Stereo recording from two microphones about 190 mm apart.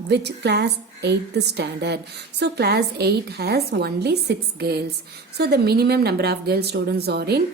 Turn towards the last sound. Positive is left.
turn(degrees=-55)  # may be behind; listen again after turning